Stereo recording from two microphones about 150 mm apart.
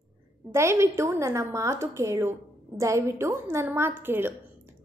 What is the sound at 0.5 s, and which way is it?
A woman's voice, 20° right (ahead or behind).